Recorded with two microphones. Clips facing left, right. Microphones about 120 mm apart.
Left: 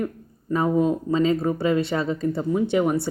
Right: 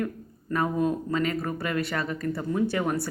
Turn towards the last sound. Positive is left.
turn(degrees=20)  # may be behind; listen again after turning